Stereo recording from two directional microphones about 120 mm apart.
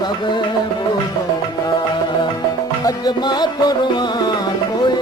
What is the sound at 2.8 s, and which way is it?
Music, 35° left (ahead or behind).